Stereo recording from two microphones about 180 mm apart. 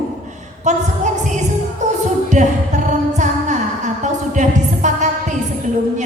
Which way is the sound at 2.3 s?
40° right (ahead or behind).